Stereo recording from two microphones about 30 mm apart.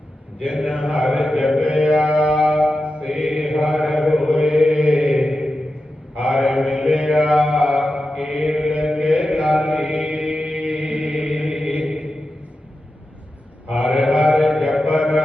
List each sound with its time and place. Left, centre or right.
0.4 s a man's voice: right
1.5 s mantra: right
4.3 s mantra: right
5.3 s a sound: right
6.1 s mantra: right
7.9 s mantra: centre
8.2 s mantra: right
10.6 s chant: right
11.6 s mantra: right
13.7 s mantra: right